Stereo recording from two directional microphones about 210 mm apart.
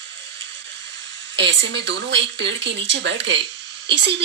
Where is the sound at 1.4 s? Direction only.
60° right (ahead or behind).